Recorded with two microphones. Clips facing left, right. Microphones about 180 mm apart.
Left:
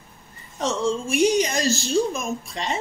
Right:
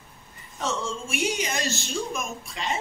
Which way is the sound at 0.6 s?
40° left (ahead or behind).